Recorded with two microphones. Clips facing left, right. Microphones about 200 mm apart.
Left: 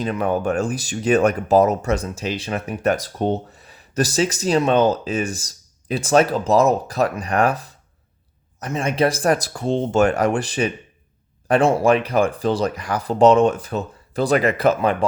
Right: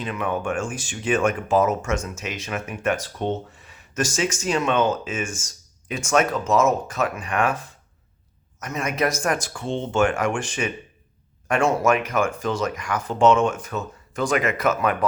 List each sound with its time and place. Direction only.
0.0 s speech: 40° left (ahead or behind)